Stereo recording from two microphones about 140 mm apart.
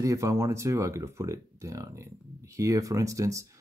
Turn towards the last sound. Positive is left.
turn(degrees=-25)  # may be behind; listen again after turning